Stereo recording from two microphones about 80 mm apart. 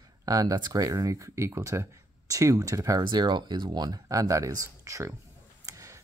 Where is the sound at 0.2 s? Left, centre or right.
Right.